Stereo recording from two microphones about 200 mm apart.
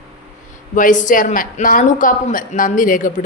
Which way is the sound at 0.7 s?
40° left (ahead or behind).